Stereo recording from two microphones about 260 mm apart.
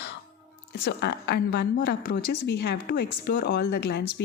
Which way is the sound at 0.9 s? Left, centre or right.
Left.